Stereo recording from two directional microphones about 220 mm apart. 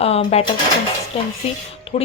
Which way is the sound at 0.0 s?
25° left (ahead or behind).